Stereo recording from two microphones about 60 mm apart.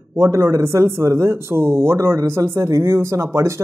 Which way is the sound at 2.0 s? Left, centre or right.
Right.